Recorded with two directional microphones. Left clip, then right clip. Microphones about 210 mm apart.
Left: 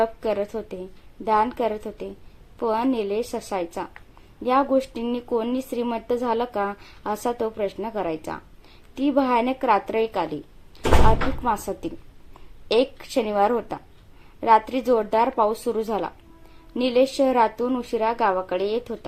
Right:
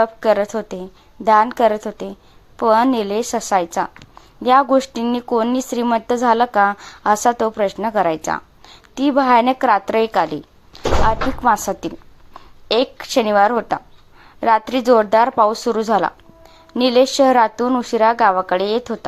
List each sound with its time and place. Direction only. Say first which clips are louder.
0.0 s speech: right 8 dB; 20° right (ahead or behind)
11.4 s a woman's voice: right 11 dB; 20° right (ahead or behind)